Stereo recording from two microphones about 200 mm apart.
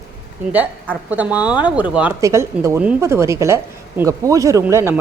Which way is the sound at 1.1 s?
5° right (ahead or behind).